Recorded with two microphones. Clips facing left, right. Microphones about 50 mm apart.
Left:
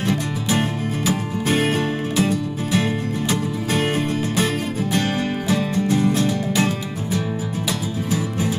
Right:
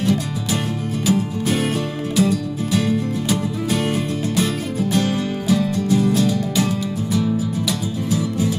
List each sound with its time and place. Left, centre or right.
0.0 s music: left